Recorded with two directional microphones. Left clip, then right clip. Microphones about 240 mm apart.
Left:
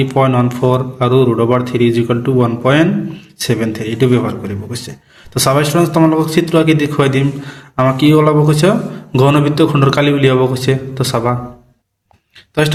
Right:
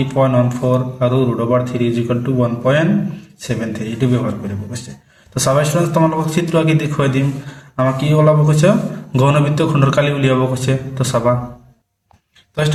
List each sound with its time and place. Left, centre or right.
0.0 s a man's voice: left